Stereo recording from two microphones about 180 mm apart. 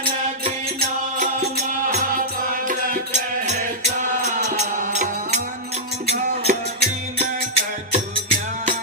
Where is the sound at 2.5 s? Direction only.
50° right (ahead or behind).